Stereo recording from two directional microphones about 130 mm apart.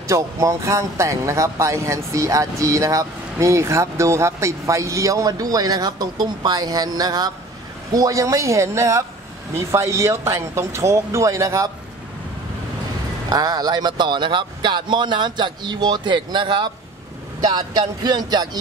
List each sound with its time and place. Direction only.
0.0 s speech: 25° right (ahead or behind)
13.3 s speech: 30° right (ahead or behind)